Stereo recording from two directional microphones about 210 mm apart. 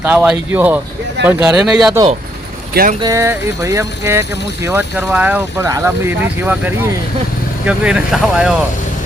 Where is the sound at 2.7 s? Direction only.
45° right (ahead or behind).